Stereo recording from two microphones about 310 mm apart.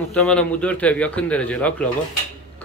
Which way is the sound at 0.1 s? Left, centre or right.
Centre.